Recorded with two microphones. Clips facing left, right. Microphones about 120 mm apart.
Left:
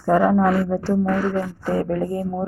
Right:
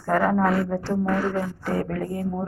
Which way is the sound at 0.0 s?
20° left (ahead or behind).